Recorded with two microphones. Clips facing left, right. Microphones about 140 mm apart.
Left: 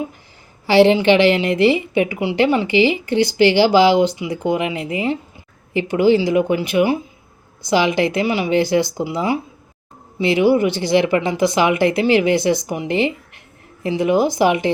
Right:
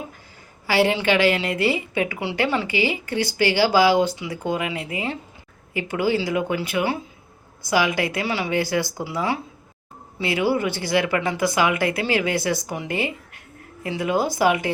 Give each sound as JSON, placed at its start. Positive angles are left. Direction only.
{"t": 0.7, "sound": "a woman's voice", "side_deg": 25}